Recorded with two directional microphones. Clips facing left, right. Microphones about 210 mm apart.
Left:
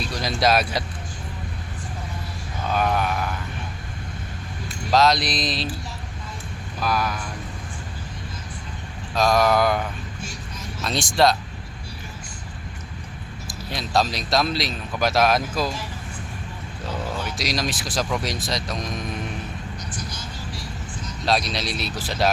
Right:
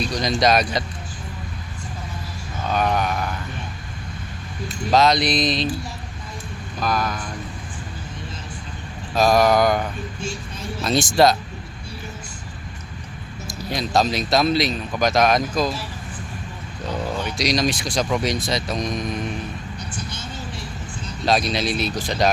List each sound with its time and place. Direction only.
0.0 s a man's voice: 5° left (ahead or behind)
2.6 s a man's voice: 5° left (ahead or behind)
4.9 s a man's voice: centre (ahead or behind)
6.7 s speech: 5° left (ahead or behind)
9.1 s a man's voice: 5° right (ahead or behind)
10.2 s speech: 30° right (ahead or behind)
10.8 s a man's voice: centre (ahead or behind)
13.5 s a man's voice: centre (ahead or behind)
17.2 s a man's voice: centre (ahead or behind)
20.0 s vehicle: 25° right (ahead or behind)
21.2 s a man's voice: centre (ahead or behind)